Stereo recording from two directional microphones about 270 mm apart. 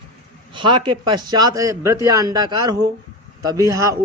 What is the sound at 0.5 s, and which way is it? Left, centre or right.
A man's voice, centre.